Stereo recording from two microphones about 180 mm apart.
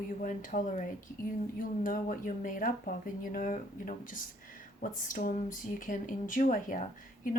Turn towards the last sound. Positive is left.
turn(degrees=50)  # may be behind; listen again after turning